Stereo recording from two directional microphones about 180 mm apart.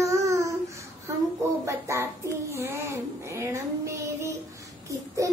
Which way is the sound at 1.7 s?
15° right (ahead or behind).